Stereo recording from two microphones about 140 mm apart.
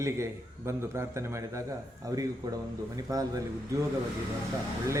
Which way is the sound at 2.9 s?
25° right (ahead or behind).